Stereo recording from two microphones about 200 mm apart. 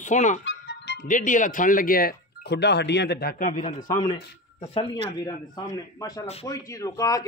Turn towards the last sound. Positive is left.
turn(degrees=15)  # may be behind; listen again after turning